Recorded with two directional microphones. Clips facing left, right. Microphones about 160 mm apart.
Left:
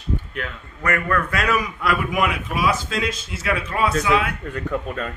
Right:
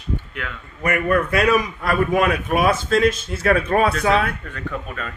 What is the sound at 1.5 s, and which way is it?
Speech, 40° right (ahead or behind).